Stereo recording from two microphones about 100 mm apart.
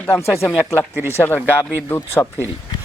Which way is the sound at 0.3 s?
30° left (ahead or behind).